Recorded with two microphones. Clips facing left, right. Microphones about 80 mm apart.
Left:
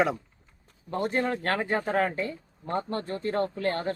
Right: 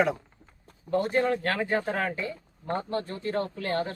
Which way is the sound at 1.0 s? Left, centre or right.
Left.